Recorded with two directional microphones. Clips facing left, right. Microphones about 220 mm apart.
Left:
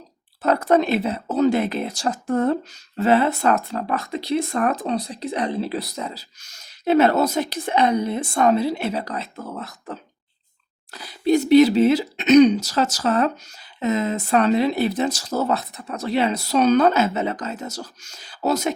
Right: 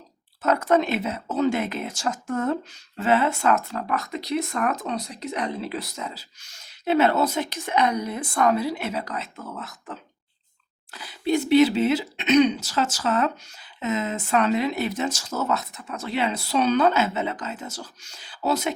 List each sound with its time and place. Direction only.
0.4 s speech: 35° left (ahead or behind)